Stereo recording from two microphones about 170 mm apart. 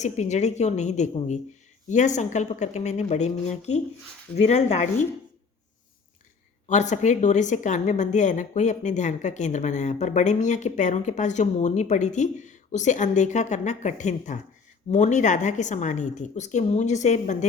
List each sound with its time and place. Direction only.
0.0 s a woman's voice: 45° left (ahead or behind)
6.7 s a woman's voice: 45° left (ahead or behind)